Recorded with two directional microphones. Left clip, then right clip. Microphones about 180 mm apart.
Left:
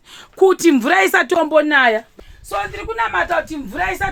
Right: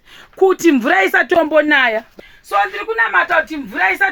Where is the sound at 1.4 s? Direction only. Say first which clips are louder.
Even; 20° right (ahead or behind).